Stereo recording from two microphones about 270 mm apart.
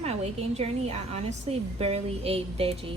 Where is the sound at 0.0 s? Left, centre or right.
Right.